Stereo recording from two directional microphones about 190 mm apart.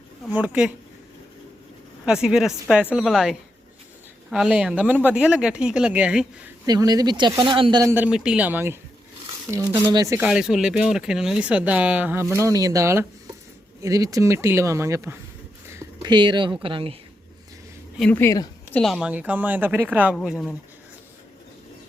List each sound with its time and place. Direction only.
0.3 s speech: 10° right (ahead or behind)
2.0 s speech: 5° right (ahead or behind)
6.7 s speech: 20° right (ahead or behind)
10.2 s speech: 5° right (ahead or behind)
15.6 s a sound: 15° right (ahead or behind)
16.6 s speech: 30° right (ahead or behind)
18.0 s speech: 10° left (ahead or behind)
18.8 s speech: 5° right (ahead or behind)